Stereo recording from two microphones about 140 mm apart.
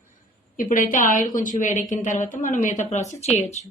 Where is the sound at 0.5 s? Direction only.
75° left (ahead or behind); by 3.2 s 55° left (ahead or behind).